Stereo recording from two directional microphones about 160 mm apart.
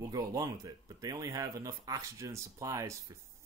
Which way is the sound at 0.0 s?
20° right (ahead or behind).